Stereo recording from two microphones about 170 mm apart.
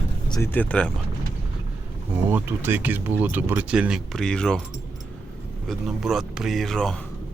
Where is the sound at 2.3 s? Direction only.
10° right (ahead or behind); by 4.6 s 5° left (ahead or behind).